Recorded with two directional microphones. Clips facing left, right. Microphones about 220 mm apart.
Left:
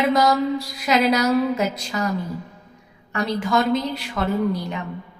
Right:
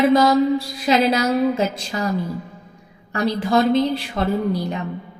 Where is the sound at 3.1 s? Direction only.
35° right (ahead or behind).